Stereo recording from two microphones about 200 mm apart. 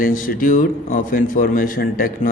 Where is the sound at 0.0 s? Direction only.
45° left (ahead or behind).